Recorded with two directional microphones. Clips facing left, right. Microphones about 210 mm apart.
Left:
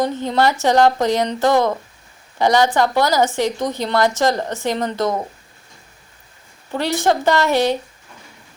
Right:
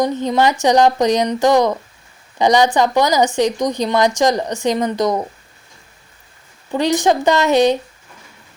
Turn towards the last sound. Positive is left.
turn(degrees=-20)  # may be behind; listen again after turning